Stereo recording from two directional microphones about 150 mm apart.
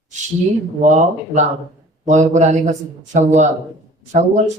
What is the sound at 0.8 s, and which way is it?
A woman's voice, 55° right (ahead or behind).